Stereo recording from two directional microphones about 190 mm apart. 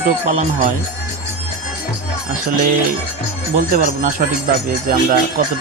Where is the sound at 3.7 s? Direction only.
45° right (ahead or behind).